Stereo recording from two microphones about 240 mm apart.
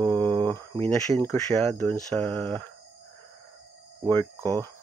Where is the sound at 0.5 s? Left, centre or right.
Centre.